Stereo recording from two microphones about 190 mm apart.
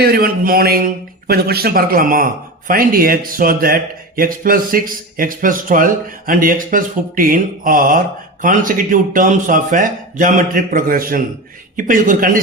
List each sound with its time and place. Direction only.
0.0 s a man's voice: 50° right (ahead or behind)